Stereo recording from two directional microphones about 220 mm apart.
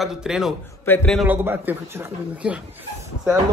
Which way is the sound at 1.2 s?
10° right (ahead or behind).